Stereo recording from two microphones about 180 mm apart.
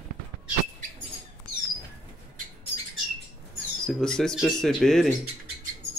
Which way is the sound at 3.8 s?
5° left (ahead or behind).